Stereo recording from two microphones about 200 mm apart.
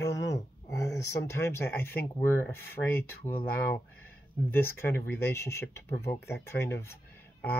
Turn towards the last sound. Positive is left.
turn(degrees=10)  # may be behind; listen again after turning